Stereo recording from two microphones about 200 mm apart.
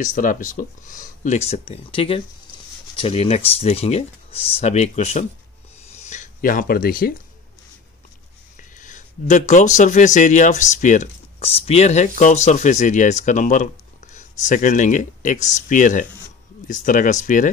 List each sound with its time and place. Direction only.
0.0 s speech: 40° left (ahead or behind)
8.5 s speech: 40° left (ahead or behind)